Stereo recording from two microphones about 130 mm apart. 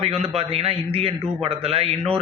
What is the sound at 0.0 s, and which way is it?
A man's voice, 50° right (ahead or behind).